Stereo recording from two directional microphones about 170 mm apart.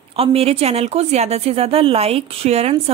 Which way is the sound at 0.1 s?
35° right (ahead or behind).